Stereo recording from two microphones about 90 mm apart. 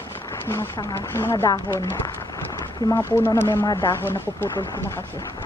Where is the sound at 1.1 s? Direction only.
30° left (ahead or behind).